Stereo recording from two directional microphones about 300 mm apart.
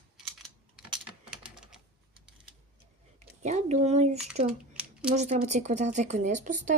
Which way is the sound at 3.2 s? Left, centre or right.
Right.